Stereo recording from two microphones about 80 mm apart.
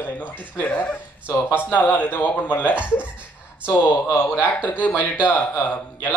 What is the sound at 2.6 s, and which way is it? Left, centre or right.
Speech, centre.